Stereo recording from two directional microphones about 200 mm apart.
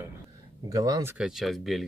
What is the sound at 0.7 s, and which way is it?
Speech, 15° right (ahead or behind).